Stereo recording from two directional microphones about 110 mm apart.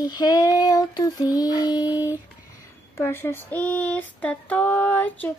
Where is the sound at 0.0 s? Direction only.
40° left (ahead or behind).